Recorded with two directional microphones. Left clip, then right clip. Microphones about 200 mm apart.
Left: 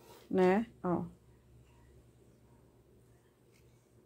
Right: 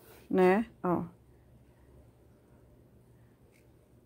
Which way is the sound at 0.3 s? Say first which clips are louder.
Right 4 dB; 20° right (ahead or behind).